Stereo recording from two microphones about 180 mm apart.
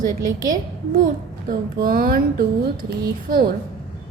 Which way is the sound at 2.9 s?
60° right (ahead or behind).